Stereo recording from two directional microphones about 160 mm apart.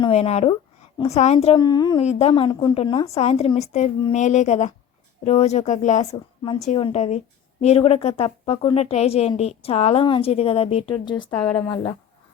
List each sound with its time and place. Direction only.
0.0 s a woman's voice: 40° left (ahead or behind)
1.5 s speech: 25° left (ahead or behind)
2.0 s a woman's voice: 40° left (ahead or behind)
2.3 s a woman's voice: 30° left (ahead or behind)